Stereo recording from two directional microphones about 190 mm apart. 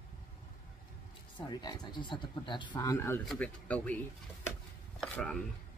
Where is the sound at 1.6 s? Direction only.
20° left (ahead or behind).